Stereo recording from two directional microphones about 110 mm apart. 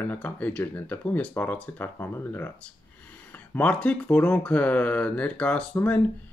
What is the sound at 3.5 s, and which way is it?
Speech, 15° left (ahead or behind).